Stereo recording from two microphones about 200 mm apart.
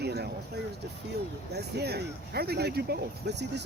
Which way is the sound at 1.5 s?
55° right (ahead or behind).